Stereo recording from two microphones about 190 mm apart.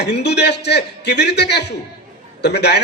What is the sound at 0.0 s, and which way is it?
A man's voice, 60° left (ahead or behind).